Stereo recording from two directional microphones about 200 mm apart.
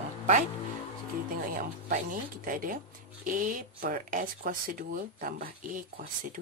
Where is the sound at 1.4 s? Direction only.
45° right (ahead or behind).